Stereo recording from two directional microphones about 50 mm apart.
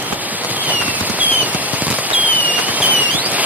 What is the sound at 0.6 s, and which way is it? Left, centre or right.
Firecracker, right.